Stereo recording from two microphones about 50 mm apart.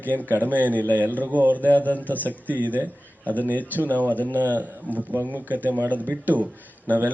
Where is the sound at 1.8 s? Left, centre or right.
Left.